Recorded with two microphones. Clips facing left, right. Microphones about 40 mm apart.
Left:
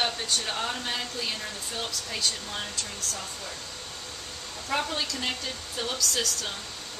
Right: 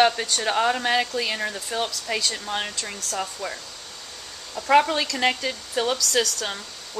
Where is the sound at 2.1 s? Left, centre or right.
Right.